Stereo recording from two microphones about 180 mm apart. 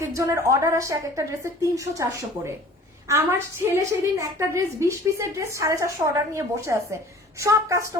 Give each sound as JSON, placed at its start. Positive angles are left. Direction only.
{"t": 0.0, "sound": "a woman's voice", "side_deg": -15}